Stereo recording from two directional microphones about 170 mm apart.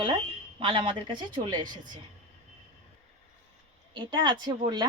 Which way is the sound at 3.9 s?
25° right (ahead or behind).